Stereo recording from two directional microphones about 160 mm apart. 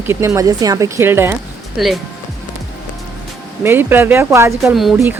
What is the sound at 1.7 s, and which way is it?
Speech, centre (ahead or behind).